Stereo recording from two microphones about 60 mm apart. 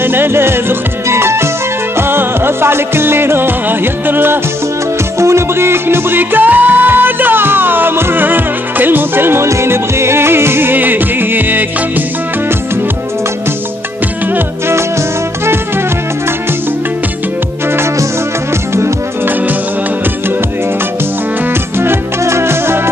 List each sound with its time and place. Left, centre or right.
0.0 s music: right
21.7 s music: right